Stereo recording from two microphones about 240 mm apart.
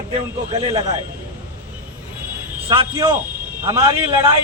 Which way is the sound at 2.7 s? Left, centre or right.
Centre.